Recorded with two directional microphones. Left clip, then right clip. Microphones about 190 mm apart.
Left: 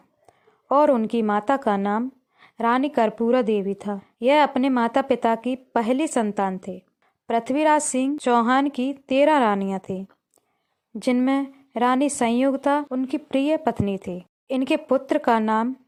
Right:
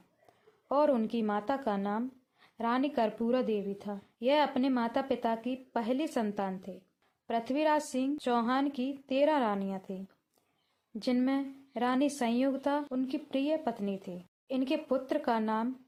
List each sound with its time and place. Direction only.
0.3 s speech: 40° left (ahead or behind)
11.0 s speech: 40° left (ahead or behind)